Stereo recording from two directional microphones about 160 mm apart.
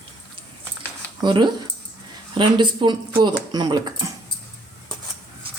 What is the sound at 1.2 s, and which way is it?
Speech, 30° right (ahead or behind).